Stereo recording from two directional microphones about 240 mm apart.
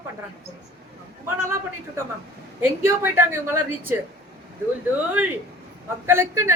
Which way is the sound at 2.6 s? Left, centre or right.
Centre.